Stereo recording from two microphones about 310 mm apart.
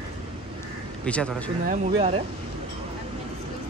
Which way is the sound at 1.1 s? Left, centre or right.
Centre.